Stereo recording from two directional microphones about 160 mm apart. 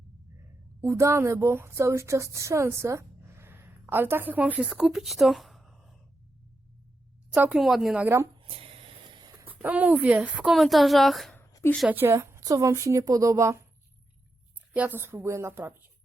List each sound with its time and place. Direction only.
0.8 s a woman's voice: 15° right (ahead or behind); by 6.0 s centre (ahead or behind)
7.3 s speech: 10° right (ahead or behind)
8.0 s speech: 15° right (ahead or behind)
8.4 s a sound: 35° right (ahead or behind)
9.4 s speech: 10° right (ahead or behind)
11.3 s a sound: 15° left (ahead or behind)
11.9 s a woman's voice: 15° right (ahead or behind)
14.7 s speech: 10° right (ahead or behind)